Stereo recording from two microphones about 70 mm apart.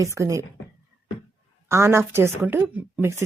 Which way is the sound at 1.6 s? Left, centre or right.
Right.